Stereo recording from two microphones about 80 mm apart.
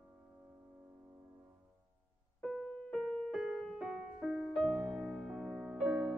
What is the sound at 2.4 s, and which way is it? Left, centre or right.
Keyboard, centre.